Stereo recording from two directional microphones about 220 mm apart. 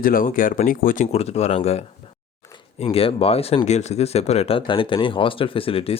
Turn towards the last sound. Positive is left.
turn(degrees=25)  # may be behind; listen again after turning